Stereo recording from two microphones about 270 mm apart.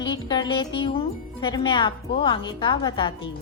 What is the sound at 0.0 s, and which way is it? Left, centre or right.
Speech, centre.